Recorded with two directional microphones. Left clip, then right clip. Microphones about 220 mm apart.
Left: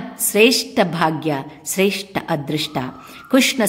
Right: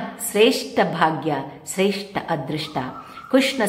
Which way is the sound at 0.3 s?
45° left (ahead or behind).